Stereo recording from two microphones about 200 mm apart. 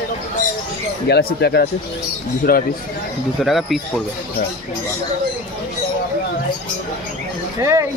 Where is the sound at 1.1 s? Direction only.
55° left (ahead or behind).